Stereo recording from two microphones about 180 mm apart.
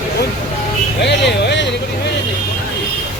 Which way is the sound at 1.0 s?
75° left (ahead or behind).